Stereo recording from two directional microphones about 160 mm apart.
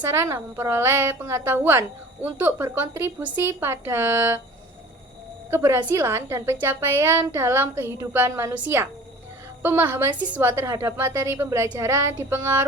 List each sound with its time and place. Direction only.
0.1 s a woman's voice: 15° right (ahead or behind)
5.5 s a woman's voice: 15° right (ahead or behind)